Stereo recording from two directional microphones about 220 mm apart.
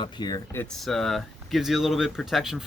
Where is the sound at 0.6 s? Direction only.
Centre (ahead or behind).